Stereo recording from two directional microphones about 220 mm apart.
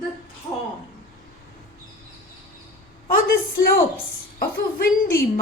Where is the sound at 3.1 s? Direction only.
40° left (ahead or behind).